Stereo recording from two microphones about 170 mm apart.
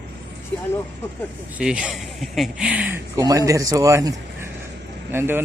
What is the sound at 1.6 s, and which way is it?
Speech, 5° right (ahead or behind).